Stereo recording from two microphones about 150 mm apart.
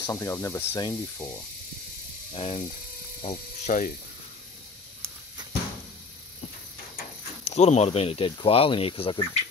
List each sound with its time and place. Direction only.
0.0 s speech: 20° left (ahead or behind)
2.3 s speech: 40° left (ahead or behind)
3.3 s speech: 55° left (ahead or behind)
7.4 s speech: 45° left (ahead or behind)